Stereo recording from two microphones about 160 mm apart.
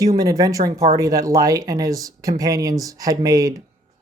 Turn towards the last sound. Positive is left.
turn(degrees=-20)  # may be behind; listen again after turning